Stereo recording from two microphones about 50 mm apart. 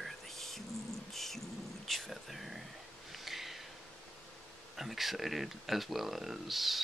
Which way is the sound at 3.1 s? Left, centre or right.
Centre.